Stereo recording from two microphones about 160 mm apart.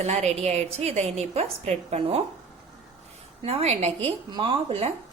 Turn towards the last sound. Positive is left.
turn(degrees=-35)  # may be behind; listen again after turning